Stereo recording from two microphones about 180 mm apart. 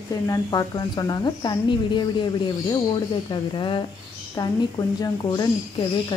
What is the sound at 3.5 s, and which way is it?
Speech, 25° left (ahead or behind).